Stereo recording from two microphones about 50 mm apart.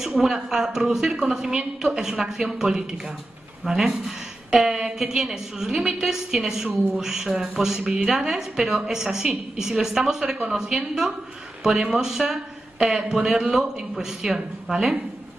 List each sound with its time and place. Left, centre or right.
0.2 s a woman's voice: centre
2.0 s a woman's voice: centre
4.0 s a sound: centre
4.9 s a woman's voice: centre